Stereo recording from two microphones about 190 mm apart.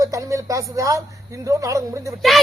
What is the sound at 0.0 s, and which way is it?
Speech, 15° right (ahead or behind).